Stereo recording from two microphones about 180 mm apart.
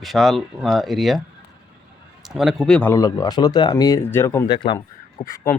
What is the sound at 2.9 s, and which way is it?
Speech, 20° left (ahead or behind).